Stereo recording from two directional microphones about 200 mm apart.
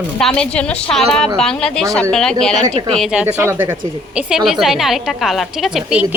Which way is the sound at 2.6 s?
30° right (ahead or behind).